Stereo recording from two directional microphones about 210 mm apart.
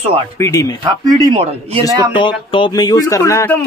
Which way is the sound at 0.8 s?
20° right (ahead or behind).